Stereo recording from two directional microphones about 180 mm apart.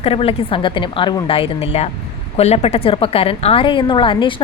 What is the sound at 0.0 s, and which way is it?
A woman's voice, 30° left (ahead or behind).